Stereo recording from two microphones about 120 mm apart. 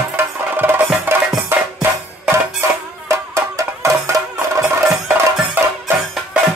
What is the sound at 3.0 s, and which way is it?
Music, 25° right (ahead or behind).